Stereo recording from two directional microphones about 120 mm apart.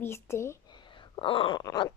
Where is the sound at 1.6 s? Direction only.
35° left (ahead or behind).